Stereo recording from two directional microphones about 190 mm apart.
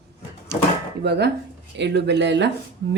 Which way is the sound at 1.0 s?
60° right (ahead or behind).